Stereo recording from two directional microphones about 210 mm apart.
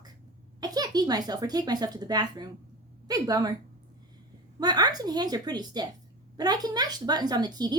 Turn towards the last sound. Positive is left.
turn(degrees=-20)  # may be behind; listen again after turning